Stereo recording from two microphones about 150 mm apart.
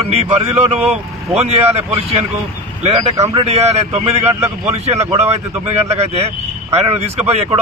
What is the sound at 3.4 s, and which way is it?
A man's voice, 45° right (ahead or behind).